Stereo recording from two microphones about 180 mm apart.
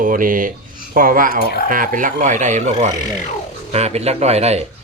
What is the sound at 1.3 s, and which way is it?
Speech, 60° left (ahead or behind).